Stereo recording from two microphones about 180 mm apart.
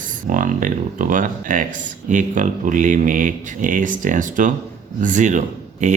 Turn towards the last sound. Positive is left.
turn(degrees=-40)  # may be behind; listen again after turning